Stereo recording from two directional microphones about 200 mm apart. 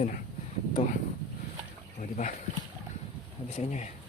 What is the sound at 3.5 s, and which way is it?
Speech, 35° left (ahead or behind).